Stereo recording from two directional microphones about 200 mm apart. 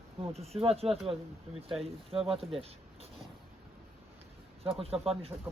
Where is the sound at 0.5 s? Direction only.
30° right (ahead or behind).